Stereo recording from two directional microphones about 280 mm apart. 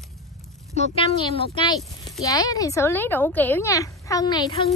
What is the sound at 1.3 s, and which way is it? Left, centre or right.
A woman's voice, centre.